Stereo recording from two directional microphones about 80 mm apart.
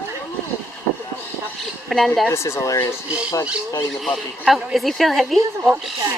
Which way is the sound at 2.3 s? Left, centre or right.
Left.